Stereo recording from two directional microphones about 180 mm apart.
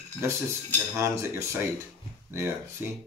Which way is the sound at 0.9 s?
15° right (ahead or behind).